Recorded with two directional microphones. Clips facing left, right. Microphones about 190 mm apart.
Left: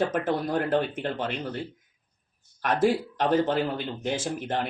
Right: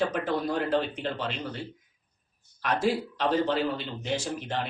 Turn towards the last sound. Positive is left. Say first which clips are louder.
# left 2 dB
turn(degrees=50)  # may be behind; listen again after turning